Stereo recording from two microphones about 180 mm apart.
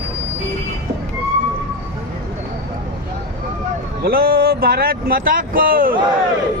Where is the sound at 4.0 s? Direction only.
55° right (ahead or behind).